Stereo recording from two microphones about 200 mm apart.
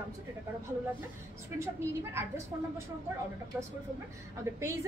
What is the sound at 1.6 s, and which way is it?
Speech, 15° right (ahead or behind).